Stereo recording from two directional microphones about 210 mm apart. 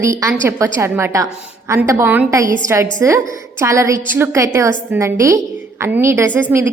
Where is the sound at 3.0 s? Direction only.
15° right (ahead or behind).